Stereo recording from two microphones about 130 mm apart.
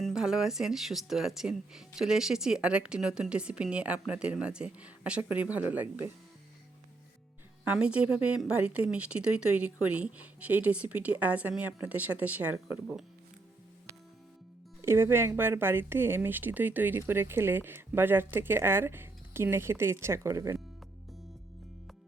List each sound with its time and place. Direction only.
0.0 s speech: 5° right (ahead or behind)
7.6 s speech: 10° right (ahead or behind)
14.8 s speech: 20° right (ahead or behind)